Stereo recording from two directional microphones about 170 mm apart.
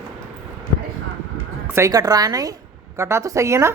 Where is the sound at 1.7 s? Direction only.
15° right (ahead or behind).